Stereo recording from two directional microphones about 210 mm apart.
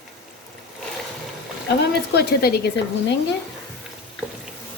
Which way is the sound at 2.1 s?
50° left (ahead or behind).